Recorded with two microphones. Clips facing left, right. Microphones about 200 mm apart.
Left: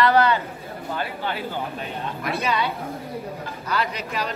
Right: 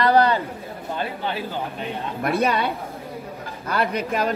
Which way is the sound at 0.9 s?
25° right (ahead or behind).